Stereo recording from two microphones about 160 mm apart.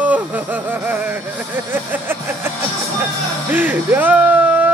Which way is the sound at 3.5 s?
10° right (ahead or behind).